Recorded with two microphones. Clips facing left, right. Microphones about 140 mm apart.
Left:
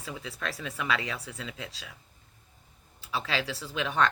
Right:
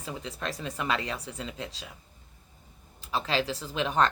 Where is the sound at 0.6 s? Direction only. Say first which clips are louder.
Right 1 dB; 40° right (ahead or behind).